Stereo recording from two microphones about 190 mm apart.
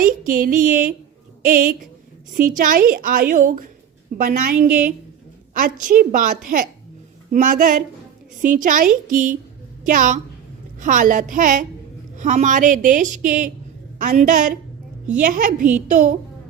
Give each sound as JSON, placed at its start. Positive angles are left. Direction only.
{"t": 0.0, "sound": "a woman's voice", "side_deg": -45}